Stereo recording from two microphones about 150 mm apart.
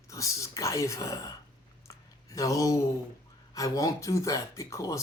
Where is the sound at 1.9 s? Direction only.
20° left (ahead or behind).